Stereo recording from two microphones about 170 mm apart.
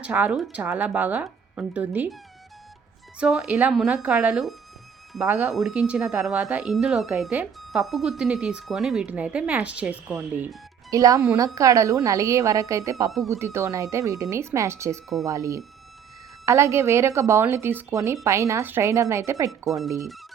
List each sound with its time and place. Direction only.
0.0 s speech: 10° right (ahead or behind)
3.2 s speech: 5° right (ahead or behind)
19.5 s speech: centre (ahead or behind)